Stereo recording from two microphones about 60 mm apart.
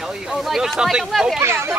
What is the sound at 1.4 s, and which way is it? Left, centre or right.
Speech, right.